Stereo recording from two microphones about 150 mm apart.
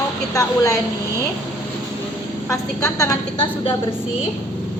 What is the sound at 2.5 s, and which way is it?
Speech, 20° left (ahead or behind).